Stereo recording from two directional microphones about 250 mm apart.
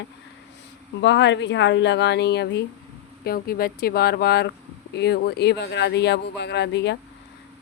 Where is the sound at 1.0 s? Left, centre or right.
Left.